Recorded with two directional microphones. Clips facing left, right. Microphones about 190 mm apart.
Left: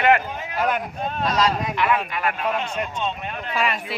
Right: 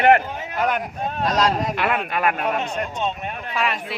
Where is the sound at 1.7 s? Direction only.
60° right (ahead or behind).